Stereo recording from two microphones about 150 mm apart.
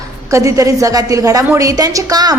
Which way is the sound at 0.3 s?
20° right (ahead or behind).